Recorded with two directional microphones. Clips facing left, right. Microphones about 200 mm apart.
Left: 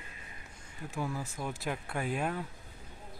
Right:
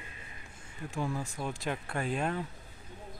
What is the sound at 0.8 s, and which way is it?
Speech, 5° left (ahead or behind).